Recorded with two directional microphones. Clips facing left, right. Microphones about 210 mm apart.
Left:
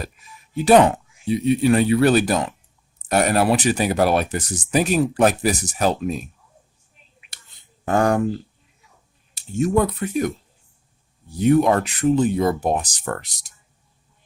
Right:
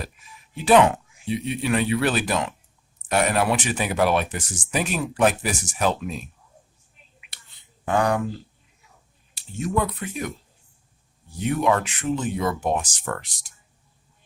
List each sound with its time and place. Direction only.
0.5 s speech: 40° left (ahead or behind)
7.9 s speech: 45° left (ahead or behind)
9.3 s speech: 45° left (ahead or behind)
11.3 s speech: 40° left (ahead or behind)